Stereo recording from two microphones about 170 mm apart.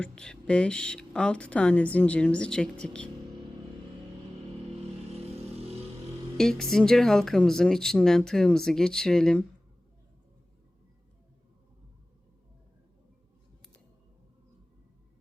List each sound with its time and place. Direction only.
0.0 s speech: 5° left (ahead or behind)
5.3 s vehicle: 35° right (ahead or behind)
6.3 s speech: 5° left (ahead or behind)